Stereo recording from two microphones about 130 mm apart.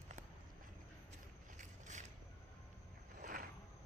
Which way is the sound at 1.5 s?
70° right (ahead or behind).